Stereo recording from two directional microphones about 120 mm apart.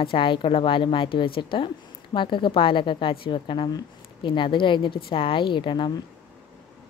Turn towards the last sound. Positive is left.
turn(degrees=40)  # may be behind; listen again after turning